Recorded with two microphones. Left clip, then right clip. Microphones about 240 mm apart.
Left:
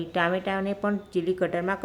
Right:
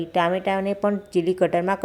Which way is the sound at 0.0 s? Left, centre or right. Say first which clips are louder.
Right 4 dB; centre.